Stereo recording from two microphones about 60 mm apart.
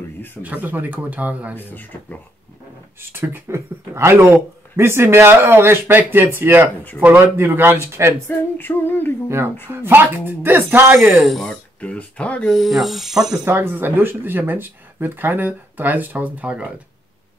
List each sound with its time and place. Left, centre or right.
0.4 s speech: right
1.5 s music: left
3.1 s speech: right
8.3 s music: left
9.7 s speech: right
11.2 s speech: centre
11.8 s speech: left
12.4 s speech: centre
13.5 s speech: right